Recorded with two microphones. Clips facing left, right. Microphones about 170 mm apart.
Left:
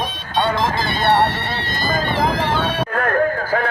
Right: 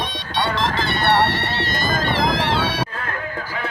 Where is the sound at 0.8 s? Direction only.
70° right (ahead or behind).